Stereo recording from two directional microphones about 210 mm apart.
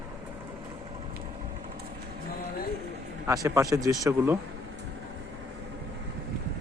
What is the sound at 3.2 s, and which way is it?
Speech, 15° right (ahead or behind).